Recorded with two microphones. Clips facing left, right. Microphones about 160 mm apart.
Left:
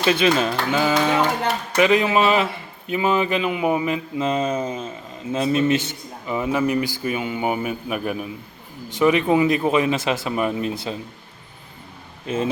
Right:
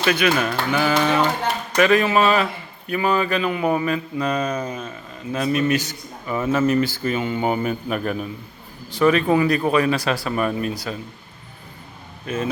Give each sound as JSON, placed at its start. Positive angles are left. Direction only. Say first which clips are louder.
{"t": 0.0, "sound": "a man's voice", "louder": "left 1 dB", "side_deg": 25}
{"t": 12.2, "sound": "speech", "louder": "left 2 dB", "side_deg": 25}